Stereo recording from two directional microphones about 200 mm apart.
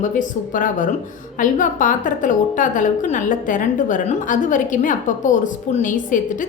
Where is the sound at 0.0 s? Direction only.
40° left (ahead or behind).